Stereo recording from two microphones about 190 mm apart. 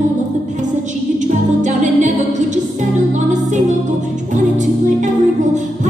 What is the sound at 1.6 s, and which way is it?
Music, 40° right (ahead or behind).